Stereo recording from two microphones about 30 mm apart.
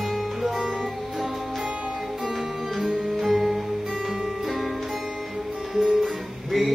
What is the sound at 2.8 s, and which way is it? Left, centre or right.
Music, right.